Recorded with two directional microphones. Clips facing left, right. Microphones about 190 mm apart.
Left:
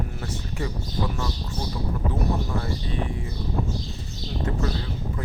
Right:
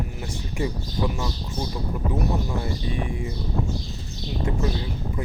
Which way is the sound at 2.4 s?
15° right (ahead or behind).